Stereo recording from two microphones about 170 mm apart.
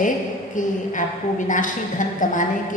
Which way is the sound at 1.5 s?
50° left (ahead or behind).